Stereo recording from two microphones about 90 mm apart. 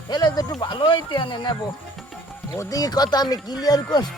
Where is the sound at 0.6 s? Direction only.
65° left (ahead or behind).